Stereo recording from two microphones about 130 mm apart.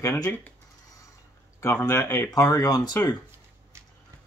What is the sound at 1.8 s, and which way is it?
Speech, 20° left (ahead or behind).